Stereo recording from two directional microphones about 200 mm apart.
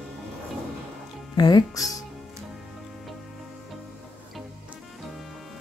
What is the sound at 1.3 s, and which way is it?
Speech, 20° left (ahead or behind).